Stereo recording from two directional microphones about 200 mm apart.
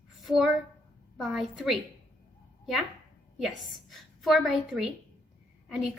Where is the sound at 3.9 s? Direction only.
Centre (ahead or behind).